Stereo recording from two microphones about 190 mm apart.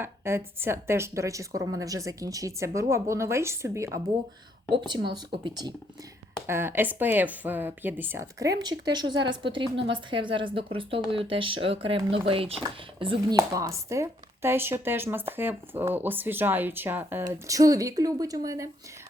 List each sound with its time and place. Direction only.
0.0 s speech: 10° right (ahead or behind)
6.5 s speech: 10° right (ahead or behind)